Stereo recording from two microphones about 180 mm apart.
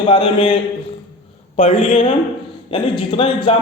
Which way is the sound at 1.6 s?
35° left (ahead or behind).